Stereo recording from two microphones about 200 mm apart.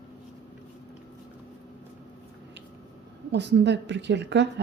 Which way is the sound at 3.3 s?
60° right (ahead or behind).